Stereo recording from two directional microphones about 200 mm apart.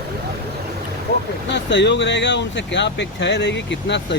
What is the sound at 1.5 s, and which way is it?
Speech, 60° left (ahead or behind).